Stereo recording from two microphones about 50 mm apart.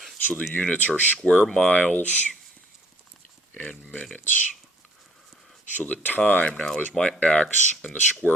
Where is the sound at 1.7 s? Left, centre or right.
Left.